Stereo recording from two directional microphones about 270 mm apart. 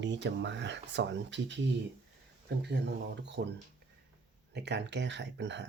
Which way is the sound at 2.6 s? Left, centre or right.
Right.